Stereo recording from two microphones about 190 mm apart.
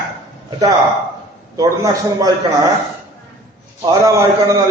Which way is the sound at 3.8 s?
20° right (ahead or behind).